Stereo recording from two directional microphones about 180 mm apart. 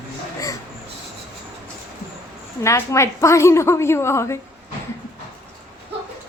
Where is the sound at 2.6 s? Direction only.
15° left (ahead or behind).